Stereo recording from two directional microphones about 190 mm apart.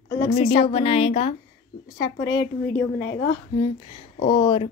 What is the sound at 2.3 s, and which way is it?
Speech, 20° left (ahead or behind).